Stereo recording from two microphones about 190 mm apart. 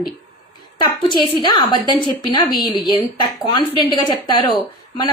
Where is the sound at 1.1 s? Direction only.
25° left (ahead or behind).